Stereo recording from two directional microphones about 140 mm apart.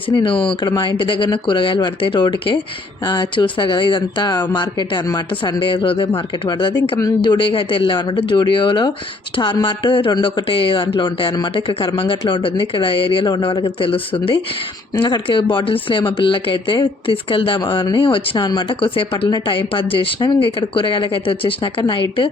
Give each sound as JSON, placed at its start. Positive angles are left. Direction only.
{"t": 0.1, "sound": "speech", "side_deg": 35}